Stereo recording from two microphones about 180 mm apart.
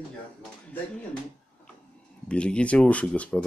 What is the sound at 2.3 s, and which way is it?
Speech, 5° left (ahead or behind).